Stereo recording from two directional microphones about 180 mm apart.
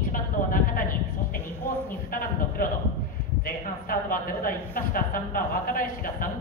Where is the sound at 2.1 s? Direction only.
50° left (ahead or behind).